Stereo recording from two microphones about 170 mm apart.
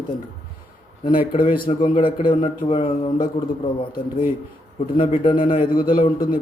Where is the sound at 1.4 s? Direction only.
55° left (ahead or behind).